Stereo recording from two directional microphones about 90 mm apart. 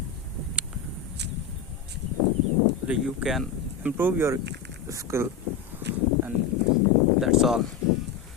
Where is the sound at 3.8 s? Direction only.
25° right (ahead or behind).